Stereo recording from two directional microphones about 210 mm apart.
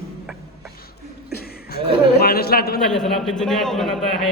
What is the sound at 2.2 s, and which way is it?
Speech, 45° left (ahead or behind).